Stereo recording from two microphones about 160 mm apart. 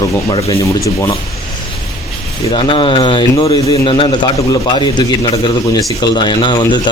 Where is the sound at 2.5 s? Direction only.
30° left (ahead or behind).